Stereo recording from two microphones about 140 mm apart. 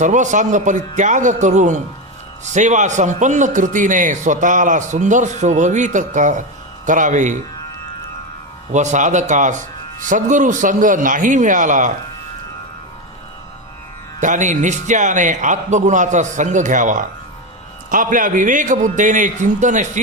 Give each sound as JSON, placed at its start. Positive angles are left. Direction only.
{"t": 0.0, "sound": "a man's voice", "side_deg": -60}
{"t": 8.7, "sound": "a man's voice", "side_deg": -60}
{"t": 14.2, "sound": "a man's voice", "side_deg": -65}